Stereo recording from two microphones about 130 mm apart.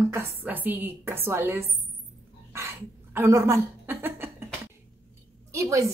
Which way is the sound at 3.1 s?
20° right (ahead or behind).